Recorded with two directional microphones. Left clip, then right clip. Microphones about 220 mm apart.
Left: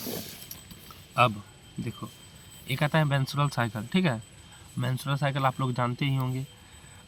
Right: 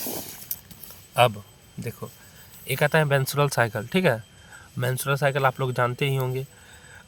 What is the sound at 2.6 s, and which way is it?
Speech, 50° right (ahead or behind).